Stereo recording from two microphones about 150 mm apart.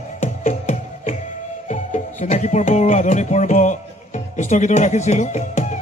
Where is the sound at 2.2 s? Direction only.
50° left (ahead or behind).